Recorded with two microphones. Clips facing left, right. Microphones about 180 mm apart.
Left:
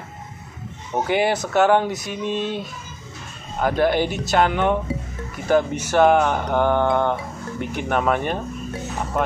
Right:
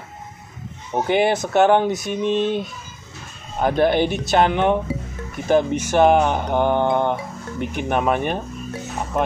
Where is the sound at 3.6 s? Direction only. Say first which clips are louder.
Right 2 dB; 25° right (ahead or behind).